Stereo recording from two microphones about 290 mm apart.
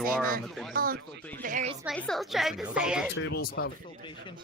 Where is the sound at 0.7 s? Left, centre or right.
Right.